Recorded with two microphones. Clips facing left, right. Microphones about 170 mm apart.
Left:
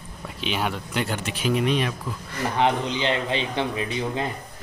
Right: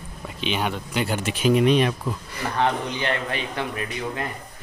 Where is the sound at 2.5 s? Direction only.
20° left (ahead or behind).